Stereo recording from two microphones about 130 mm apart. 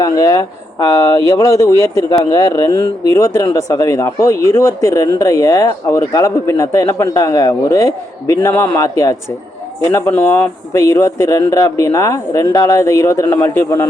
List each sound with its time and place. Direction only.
0.0 s speech: 25° left (ahead or behind)